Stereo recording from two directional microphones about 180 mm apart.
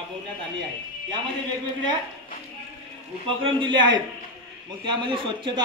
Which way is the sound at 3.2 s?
30° right (ahead or behind).